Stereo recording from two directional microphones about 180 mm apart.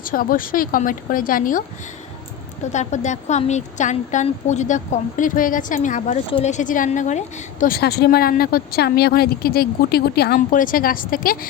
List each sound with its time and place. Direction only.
0.0 s a woman's voice: 50° left (ahead or behind)
2.6 s a woman's voice: 40° left (ahead or behind)
7.8 s a woman's voice: 60° left (ahead or behind)